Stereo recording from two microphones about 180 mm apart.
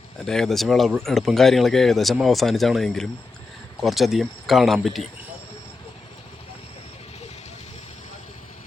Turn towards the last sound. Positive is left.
turn(degrees=35)  # may be behind; listen again after turning